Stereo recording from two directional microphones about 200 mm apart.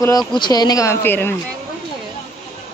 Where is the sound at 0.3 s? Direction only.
20° left (ahead or behind).